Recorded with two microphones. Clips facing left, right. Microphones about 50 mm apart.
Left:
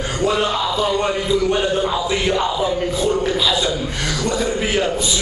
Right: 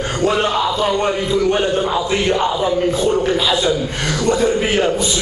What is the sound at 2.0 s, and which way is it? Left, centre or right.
Speech, centre.